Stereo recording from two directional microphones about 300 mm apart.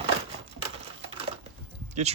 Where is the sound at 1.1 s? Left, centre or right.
Centre.